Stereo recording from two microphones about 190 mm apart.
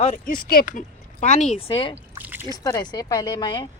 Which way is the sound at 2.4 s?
20° left (ahead or behind).